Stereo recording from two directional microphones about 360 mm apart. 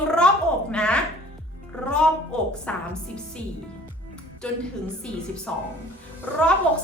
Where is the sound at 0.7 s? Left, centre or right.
Centre.